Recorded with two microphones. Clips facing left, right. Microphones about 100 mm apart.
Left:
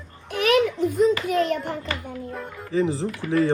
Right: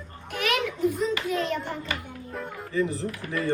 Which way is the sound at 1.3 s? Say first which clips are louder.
Left 6 dB; 65° left (ahead or behind).